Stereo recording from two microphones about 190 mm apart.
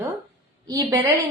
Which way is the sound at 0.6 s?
15° right (ahead or behind).